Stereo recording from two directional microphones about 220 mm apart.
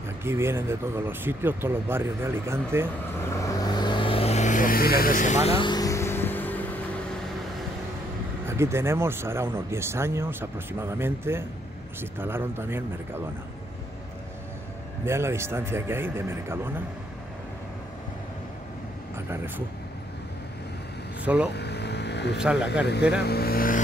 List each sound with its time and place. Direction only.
0.2 s speech: 10° right (ahead or behind)
3.2 s vehicle: 15° left (ahead or behind)
8.5 s speech: 10° right (ahead or behind)
15.0 s speech: 10° right (ahead or behind)
19.1 s speech: 10° right (ahead or behind)
21.2 s speech: 5° right (ahead or behind)
21.5 s vehicle: 50° left (ahead or behind)
22.4 s speech: 5° right (ahead or behind)
23.2 s speech: 45° left (ahead or behind)